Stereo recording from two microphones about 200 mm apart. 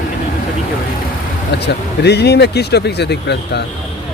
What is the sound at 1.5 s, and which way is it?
Speech, 55° left (ahead or behind).